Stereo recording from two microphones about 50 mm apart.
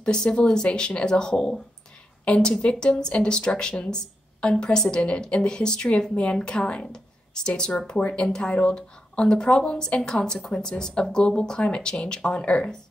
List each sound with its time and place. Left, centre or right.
0.0 s speech: centre